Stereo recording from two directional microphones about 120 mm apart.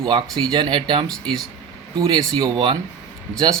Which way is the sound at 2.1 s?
40° right (ahead or behind).